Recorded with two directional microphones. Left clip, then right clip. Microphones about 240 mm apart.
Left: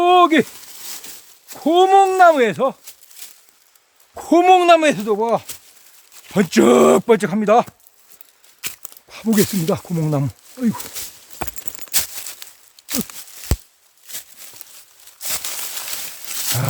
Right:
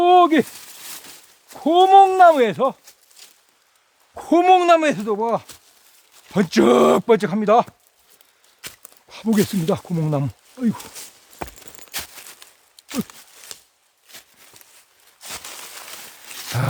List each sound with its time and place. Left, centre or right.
0.0 s a sound: centre
1.0 s speech: centre
4.1 s speech: centre
8.6 s a sound: left
9.0 s speech: centre
10.8 s speech: left
11.9 s crumpling: left
12.9 s a sound: left
15.2 s wild animals: left